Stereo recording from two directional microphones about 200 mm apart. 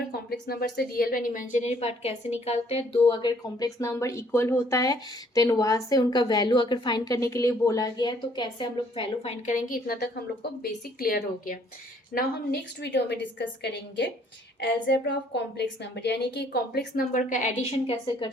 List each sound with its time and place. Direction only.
0.3 s a woman's voice: 50° left (ahead or behind); by 9.3 s 25° left (ahead or behind)
9.5 s a woman's voice: 40° left (ahead or behind)